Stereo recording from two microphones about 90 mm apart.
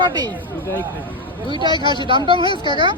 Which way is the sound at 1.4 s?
60° right (ahead or behind).